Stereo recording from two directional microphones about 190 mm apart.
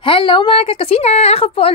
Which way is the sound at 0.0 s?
25° left (ahead or behind).